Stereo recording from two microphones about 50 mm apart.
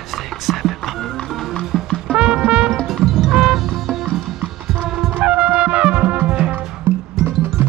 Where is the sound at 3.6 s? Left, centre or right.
Centre.